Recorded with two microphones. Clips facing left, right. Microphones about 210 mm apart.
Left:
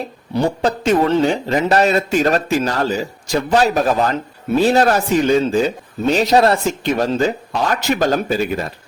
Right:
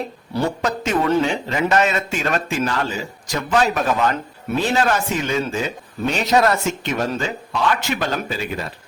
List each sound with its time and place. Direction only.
0.6 s speech: 30° left (ahead or behind)